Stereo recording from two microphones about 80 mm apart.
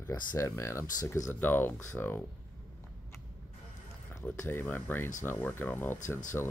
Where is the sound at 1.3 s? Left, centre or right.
Left.